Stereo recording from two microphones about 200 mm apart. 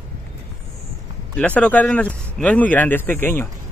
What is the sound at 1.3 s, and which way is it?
Speech, 5° left (ahead or behind).